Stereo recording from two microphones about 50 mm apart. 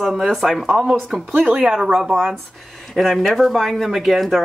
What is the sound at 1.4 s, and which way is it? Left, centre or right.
Speech, right.